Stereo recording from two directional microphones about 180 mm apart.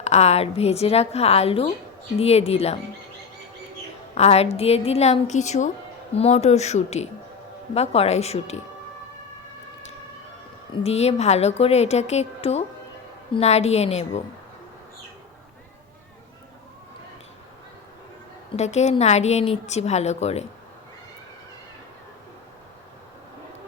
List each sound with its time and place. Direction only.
0.0 s a woman's voice: 35° left (ahead or behind)
4.1 s a woman's voice: 35° left (ahead or behind)
10.8 s a woman's voice: 35° left (ahead or behind)
18.5 s a woman's voice: 40° left (ahead or behind)